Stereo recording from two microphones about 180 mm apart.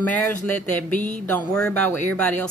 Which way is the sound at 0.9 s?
45° left (ahead or behind).